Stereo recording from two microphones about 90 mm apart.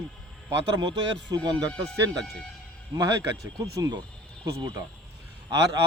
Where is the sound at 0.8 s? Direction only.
50° right (ahead or behind).